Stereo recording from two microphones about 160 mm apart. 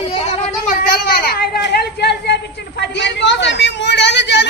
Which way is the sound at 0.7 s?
65° left (ahead or behind).